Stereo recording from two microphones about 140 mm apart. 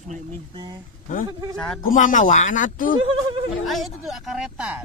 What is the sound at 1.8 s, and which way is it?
Speech, 70° left (ahead or behind).